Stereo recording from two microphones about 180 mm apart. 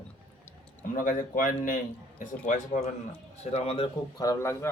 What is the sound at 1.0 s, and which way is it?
A man's voice, 50° left (ahead or behind).